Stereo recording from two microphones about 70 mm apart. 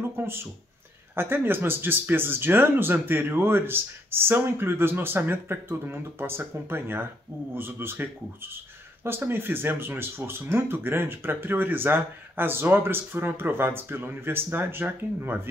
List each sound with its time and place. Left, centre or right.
1.1 s speech: right